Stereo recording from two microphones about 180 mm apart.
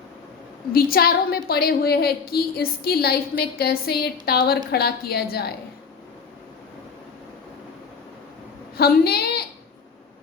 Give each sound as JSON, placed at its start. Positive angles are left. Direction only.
{"t": 0.7, "sound": "a woman's voice", "side_deg": 55}
{"t": 8.8, "sound": "a woman's voice", "side_deg": 60}